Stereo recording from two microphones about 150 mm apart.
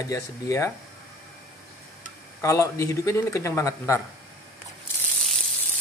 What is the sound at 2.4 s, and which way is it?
Speech, 20° left (ahead or behind).